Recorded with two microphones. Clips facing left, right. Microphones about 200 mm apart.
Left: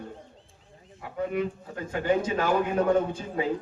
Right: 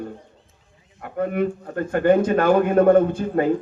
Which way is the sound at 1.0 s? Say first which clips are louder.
Right 6 dB; 55° right (ahead or behind).